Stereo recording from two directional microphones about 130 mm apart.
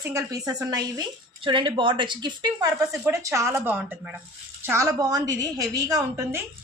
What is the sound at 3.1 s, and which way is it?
A woman's voice, 25° right (ahead or behind).